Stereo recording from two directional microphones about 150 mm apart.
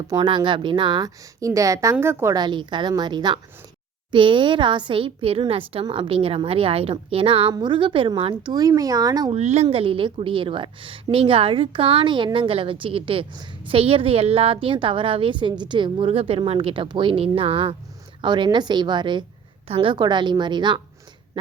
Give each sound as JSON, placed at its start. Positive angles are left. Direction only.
{"t": 0.1, "sound": "a woman's voice", "side_deg": -30}
{"t": 2.3, "sound": "a woman's voice", "side_deg": -30}
{"t": 9.3, "sound": "a woman's voice", "side_deg": -45}